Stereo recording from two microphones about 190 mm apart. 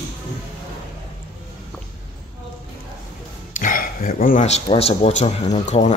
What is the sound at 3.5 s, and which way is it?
A man's voice, 45° left (ahead or behind).